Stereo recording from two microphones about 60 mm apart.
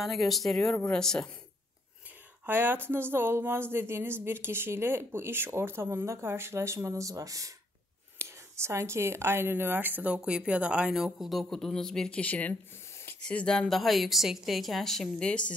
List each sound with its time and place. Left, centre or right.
0.0 s a woman's voice: centre
0.6 s speech: centre
2.4 s speech: right
8.2 s speech: right
10.1 s a woman's voice: centre
12.2 s speech: left
12.9 s a sound: left
13.2 s speech: centre
13.7 s a woman's voice: centre